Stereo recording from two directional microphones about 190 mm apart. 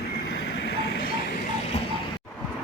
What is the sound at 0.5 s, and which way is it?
Train, 55° left (ahead or behind).